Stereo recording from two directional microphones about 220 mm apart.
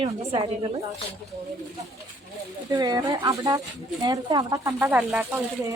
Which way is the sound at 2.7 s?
20° right (ahead or behind).